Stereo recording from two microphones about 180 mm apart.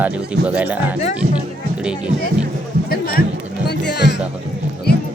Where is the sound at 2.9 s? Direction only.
55° left (ahead or behind).